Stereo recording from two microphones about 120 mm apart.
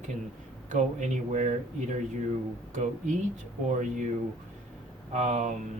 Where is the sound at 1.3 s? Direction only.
75° right (ahead or behind).